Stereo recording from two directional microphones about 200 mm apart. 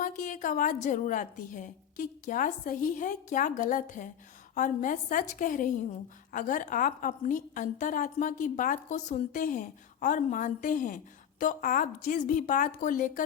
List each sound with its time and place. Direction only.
0.0 s a woman's voice: 40° left (ahead or behind)